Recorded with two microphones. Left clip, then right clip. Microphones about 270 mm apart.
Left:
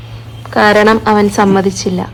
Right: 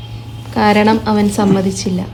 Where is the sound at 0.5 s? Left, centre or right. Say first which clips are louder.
Left 4 dB; left.